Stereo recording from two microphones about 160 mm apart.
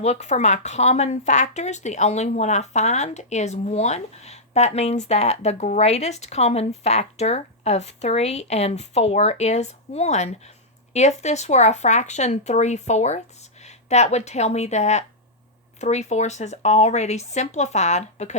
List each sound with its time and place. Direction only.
0.0 s speech: 45° left (ahead or behind)